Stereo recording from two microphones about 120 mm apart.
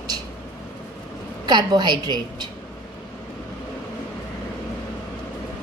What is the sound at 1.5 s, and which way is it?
A woman's voice, 40° right (ahead or behind).